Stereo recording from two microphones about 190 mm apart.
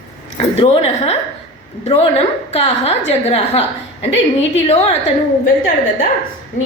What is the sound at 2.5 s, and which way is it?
A woman's voice, 35° left (ahead or behind).